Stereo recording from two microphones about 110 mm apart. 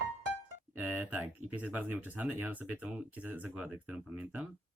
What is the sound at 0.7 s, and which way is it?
Speech, 15° right (ahead or behind).